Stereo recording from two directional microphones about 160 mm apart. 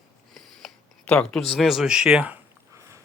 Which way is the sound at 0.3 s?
5° left (ahead or behind).